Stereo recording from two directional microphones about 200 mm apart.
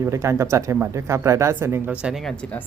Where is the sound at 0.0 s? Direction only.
15° right (ahead or behind).